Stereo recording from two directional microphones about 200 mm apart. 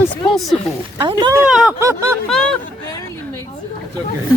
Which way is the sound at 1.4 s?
5° right (ahead or behind).